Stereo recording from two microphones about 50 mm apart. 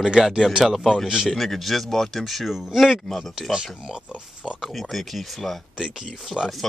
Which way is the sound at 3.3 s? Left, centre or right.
Centre.